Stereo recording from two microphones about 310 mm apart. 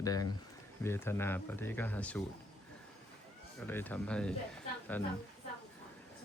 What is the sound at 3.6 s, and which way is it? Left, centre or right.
Speech, centre.